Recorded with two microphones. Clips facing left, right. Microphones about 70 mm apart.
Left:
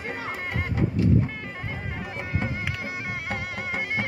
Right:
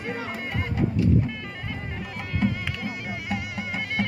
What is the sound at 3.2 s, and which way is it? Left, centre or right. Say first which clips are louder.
Music: even; left.